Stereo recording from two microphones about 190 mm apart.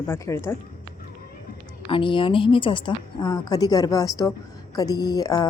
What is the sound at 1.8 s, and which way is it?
A woman's voice, 25° left (ahead or behind).